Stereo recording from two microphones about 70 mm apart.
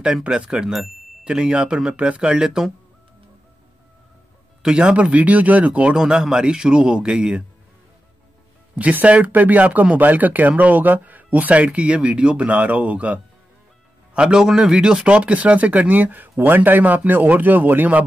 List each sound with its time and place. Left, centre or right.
0.0 s speech: centre
4.6 s speech: centre
8.7 s speech: centre
14.1 s speech: centre